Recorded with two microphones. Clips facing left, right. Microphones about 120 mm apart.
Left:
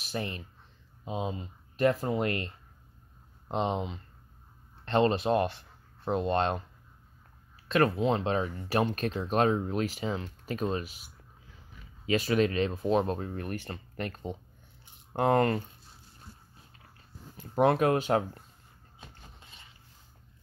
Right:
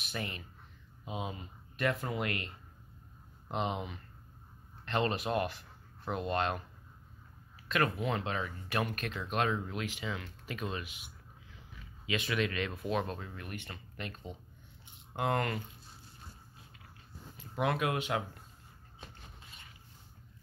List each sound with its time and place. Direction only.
0.0 s speech: 35° left (ahead or behind)
7.6 s speech: 35° left (ahead or behind)
12.1 s speech: 40° left (ahead or behind)
17.4 s speech: 40° left (ahead or behind)